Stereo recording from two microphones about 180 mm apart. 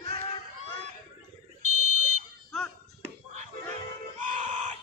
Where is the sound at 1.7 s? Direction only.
40° right (ahead or behind).